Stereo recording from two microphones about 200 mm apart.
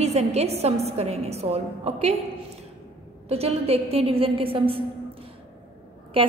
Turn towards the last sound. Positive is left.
turn(degrees=-30)  # may be behind; listen again after turning